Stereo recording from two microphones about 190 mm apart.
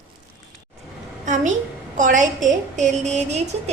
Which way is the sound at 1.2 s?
40° right (ahead or behind).